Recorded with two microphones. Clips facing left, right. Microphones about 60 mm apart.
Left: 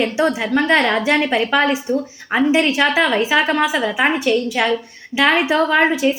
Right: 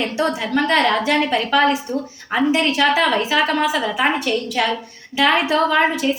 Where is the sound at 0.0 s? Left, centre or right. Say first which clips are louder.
Left 3 dB; centre.